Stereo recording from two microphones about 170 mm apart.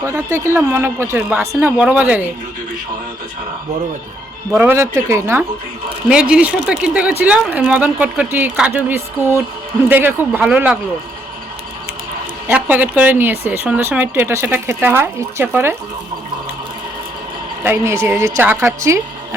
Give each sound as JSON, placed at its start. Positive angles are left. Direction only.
{"t": 0.0, "sound": "speech", "side_deg": -15}
{"t": 4.5, "sound": "speech", "side_deg": -10}
{"t": 12.5, "sound": "speech", "side_deg": -10}
{"t": 17.6, "sound": "speech", "side_deg": -15}